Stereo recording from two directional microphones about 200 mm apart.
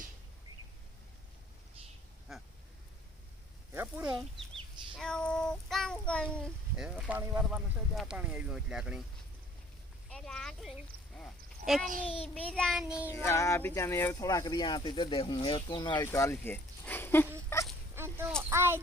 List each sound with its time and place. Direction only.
2.3 s quack: centre (ahead or behind)
3.7 s a sound: 10° right (ahead or behind)
4.9 s child singing: 5° left (ahead or behind)
10.1 s speech: 5° left (ahead or behind)
12.0 s speech: 30° left (ahead or behind)
12.3 s child singing: 5° left (ahead or behind)
13.1 s speech: 10° left (ahead or behind)
17.5 s fowl: 10° left (ahead or behind)
17.9 s a sound: 10° right (ahead or behind)
18.5 s speech: 10° right (ahead or behind)